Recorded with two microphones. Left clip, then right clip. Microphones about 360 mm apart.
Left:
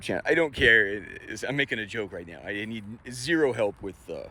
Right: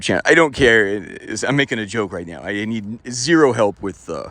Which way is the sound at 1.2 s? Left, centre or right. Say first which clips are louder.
Right 10 dB; right.